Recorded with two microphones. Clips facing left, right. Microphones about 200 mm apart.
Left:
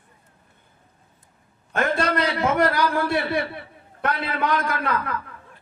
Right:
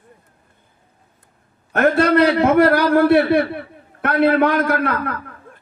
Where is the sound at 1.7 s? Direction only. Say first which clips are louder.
Right 8 dB; 60° right (ahead or behind).